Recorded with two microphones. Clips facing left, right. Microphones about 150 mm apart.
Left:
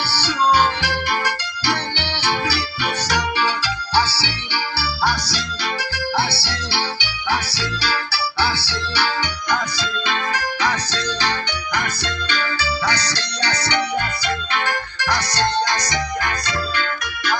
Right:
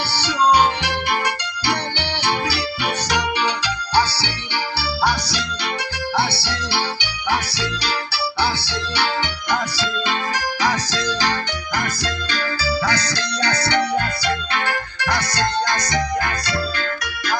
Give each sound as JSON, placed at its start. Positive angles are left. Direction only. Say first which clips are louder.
{"t": 0.1, "sound": "music", "louder": "right 1 dB", "side_deg": -20}
{"t": 8.4, "sound": "music", "louder": "even", "side_deg": -20}
{"t": 10.6, "sound": "music", "louder": "right 4 dB", "side_deg": -40}
{"t": 15.0, "sound": "music", "louder": "left 1 dB", "side_deg": -55}